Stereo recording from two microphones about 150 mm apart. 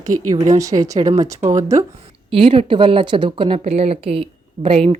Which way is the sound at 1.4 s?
55° right (ahead or behind).